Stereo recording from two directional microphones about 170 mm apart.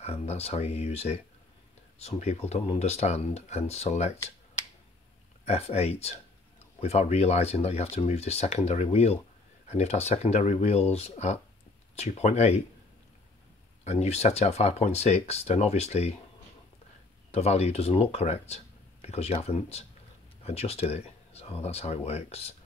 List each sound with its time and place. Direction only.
0.0 s speech: 40° left (ahead or behind)
5.4 s speech: 40° left (ahead or behind)
13.8 s speech: 40° left (ahead or behind)
17.3 s speech: 40° left (ahead or behind)